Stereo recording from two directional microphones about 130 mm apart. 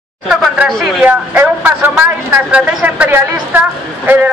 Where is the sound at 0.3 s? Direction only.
5° right (ahead or behind).